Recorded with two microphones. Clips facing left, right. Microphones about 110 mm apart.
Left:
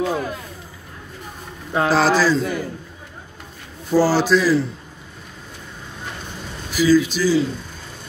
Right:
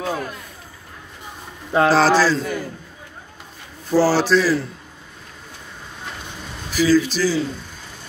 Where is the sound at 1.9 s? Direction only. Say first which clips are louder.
Even; 15° left (ahead or behind).